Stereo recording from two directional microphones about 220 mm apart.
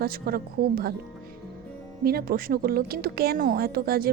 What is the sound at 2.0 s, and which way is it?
A woman's voice, 45° right (ahead or behind).